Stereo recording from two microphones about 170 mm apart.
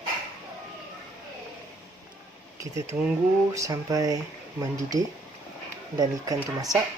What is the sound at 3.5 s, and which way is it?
Speech, 20° right (ahead or behind).